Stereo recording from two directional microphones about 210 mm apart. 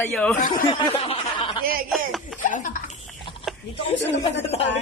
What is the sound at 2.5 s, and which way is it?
Speech, 40° left (ahead or behind).